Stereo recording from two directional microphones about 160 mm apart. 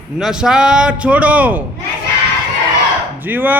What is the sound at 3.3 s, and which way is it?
Speech, 10° right (ahead or behind).